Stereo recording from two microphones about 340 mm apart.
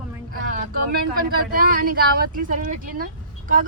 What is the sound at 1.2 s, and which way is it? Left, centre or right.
A man's voice, right.